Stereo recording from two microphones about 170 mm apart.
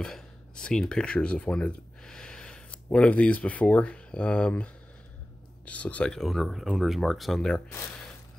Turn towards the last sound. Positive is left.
turn(degrees=0)  # may be behind; listen again after turning